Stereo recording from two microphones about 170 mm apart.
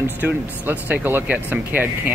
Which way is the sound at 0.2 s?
10° right (ahead or behind).